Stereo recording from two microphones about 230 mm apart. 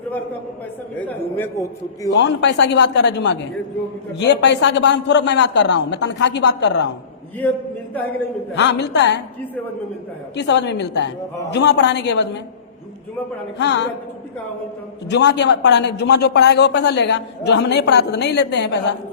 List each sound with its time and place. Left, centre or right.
0.9 s a man's voice: centre
2.0 s speech: left
8.5 s speech: left
10.3 s speech: left
13.6 s speech: left
15.1 s speech: left